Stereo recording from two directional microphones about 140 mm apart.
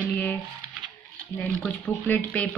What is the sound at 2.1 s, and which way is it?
Speech, 10° left (ahead or behind).